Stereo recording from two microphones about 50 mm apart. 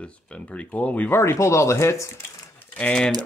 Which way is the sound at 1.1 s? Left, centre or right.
Left.